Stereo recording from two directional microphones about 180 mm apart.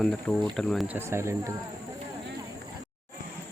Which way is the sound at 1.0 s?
15° right (ahead or behind).